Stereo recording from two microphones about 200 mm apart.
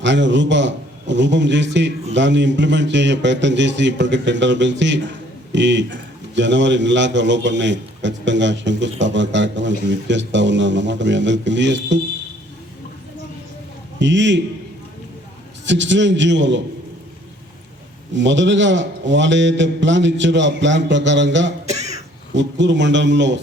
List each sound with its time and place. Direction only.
0.0 s a man's voice: 65° right (ahead or behind)
14.0 s a man's voice: 65° right (ahead or behind)
15.6 s a man's voice: 65° right (ahead or behind)
18.1 s a man's voice: 65° right (ahead or behind)
21.7 s cough: 35° right (ahead or behind)
22.3 s a man's voice: 65° right (ahead or behind)